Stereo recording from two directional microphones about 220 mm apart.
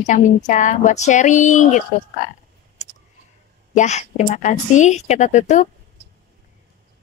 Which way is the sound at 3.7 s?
30° left (ahead or behind).